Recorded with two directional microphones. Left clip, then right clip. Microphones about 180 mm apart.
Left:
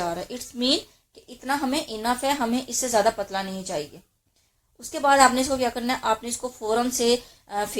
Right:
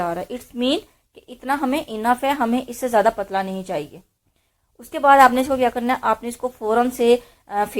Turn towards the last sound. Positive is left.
turn(degrees=-25)  # may be behind; listen again after turning